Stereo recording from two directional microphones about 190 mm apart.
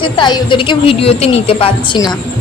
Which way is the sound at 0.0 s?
25° left (ahead or behind).